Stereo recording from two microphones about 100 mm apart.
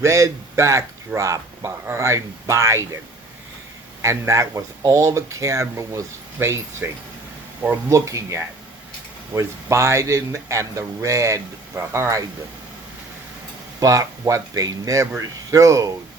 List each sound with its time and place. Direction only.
0.0 s speech: 30° right (ahead or behind)
4.0 s speech: 30° right (ahead or behind)
13.7 s speech: 35° right (ahead or behind)